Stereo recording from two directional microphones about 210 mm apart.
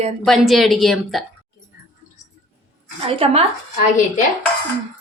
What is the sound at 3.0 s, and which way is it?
Speech, 30° right (ahead or behind).